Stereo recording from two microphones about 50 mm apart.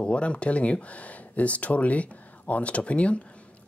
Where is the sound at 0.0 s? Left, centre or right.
Left.